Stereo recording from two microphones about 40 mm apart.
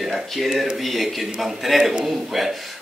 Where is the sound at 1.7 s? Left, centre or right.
Centre.